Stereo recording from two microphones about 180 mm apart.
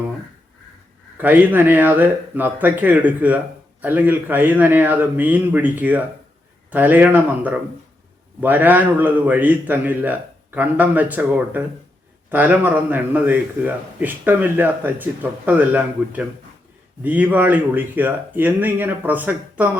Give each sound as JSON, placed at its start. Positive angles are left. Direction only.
{"t": 1.2, "sound": "speech", "side_deg": -10}